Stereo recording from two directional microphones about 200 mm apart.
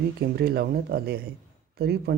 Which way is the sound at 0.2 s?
50° right (ahead or behind).